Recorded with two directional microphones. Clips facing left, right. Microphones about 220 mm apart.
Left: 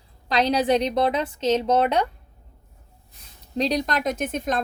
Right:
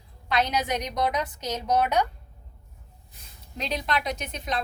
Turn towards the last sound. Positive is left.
turn(degrees=50)  # may be behind; listen again after turning